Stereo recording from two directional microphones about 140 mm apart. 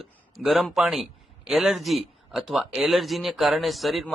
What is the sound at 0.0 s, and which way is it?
A man's voice, centre (ahead or behind).